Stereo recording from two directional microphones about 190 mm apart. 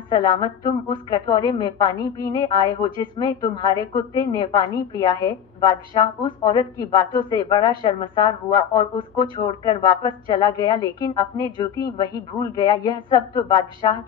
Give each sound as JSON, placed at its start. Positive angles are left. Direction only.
{"t": 0.1, "sound": "a woman's voice", "side_deg": 25}